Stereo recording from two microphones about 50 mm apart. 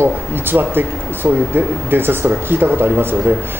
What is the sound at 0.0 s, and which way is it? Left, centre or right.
A man's voice, right.